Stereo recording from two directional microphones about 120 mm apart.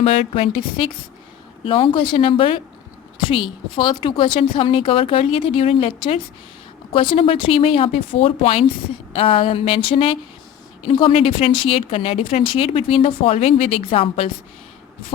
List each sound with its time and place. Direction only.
0.0 s a woman's voice: 55° left (ahead or behind)